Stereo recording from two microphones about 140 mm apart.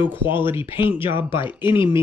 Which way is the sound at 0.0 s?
15° right (ahead or behind).